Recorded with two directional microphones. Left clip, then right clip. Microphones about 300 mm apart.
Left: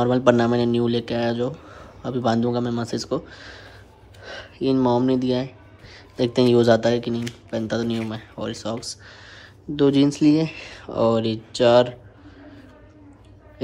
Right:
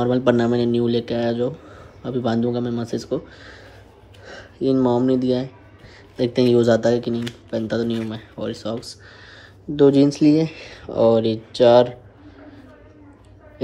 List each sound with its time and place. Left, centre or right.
0.0 s speech: centre
2.7 s speech: centre
3.1 s speech: centre
4.2 s a sound: centre
4.8 s speech: centre
10.1 s speech: centre
10.9 s speech: centre